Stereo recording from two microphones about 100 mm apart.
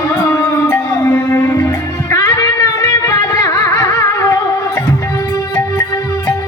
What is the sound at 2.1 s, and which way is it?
Music, 30° left (ahead or behind).